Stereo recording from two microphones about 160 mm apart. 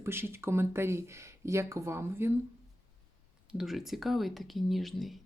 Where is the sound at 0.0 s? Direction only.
15° right (ahead or behind).